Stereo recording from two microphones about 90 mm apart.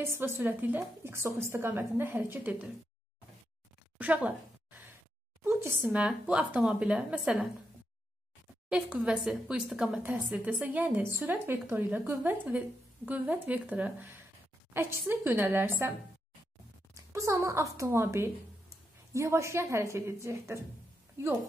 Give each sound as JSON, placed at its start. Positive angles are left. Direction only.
{"t": 0.0, "sound": "speech", "side_deg": -25}
{"t": 1.1, "sound": "speech", "side_deg": -30}
{"t": 4.0, "sound": "a sound", "side_deg": -15}
{"t": 5.4, "sound": "speech", "side_deg": -30}
{"t": 5.9, "sound": "speech", "side_deg": -10}
{"t": 8.6, "sound": "speech", "side_deg": -10}
{"t": 16.9, "sound": "a woman's voice", "side_deg": -35}